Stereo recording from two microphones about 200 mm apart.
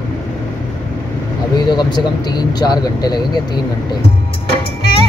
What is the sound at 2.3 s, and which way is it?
Speech, 20° left (ahead or behind).